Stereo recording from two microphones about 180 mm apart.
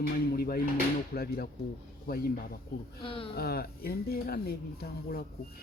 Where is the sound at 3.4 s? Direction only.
60° left (ahead or behind).